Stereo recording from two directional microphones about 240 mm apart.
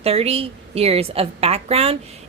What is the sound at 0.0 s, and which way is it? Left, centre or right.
A woman's voice, right.